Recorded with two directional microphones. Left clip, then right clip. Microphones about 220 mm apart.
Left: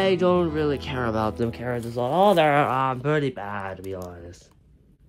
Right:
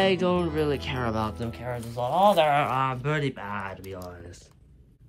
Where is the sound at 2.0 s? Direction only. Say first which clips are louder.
Left 2 dB; 65° left (ahead or behind).